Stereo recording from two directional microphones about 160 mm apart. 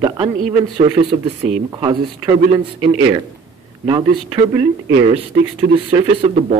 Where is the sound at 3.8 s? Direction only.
25° right (ahead or behind).